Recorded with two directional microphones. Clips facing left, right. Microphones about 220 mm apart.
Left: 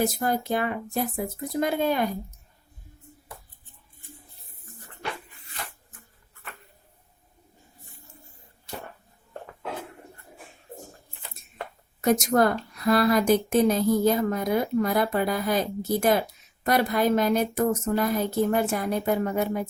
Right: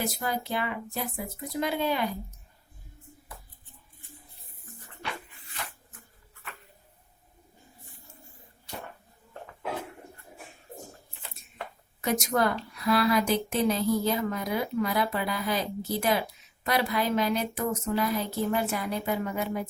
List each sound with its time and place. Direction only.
0.0 s a woman's voice: 50° left (ahead or behind)
12.3 s a woman's voice: 45° left (ahead or behind)